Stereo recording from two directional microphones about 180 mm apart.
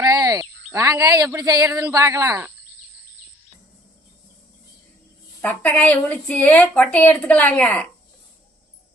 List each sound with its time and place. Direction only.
0.0 s speech: 20° right (ahead or behind)
5.4 s a woman's voice: 10° left (ahead or behind)